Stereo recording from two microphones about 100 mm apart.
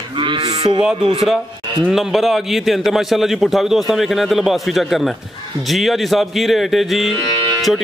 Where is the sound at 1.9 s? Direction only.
Centre (ahead or behind).